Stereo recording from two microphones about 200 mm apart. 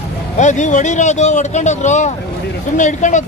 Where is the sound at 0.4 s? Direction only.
35° left (ahead or behind).